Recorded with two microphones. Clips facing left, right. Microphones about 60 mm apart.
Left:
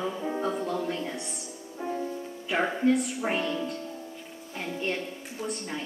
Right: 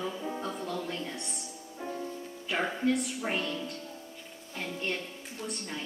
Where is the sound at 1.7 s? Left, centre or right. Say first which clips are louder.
Left 5 dB; centre.